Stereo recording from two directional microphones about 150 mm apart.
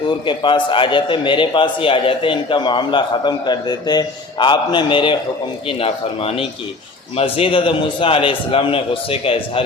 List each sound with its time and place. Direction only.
0.3 s a man's voice: 35° left (ahead or behind)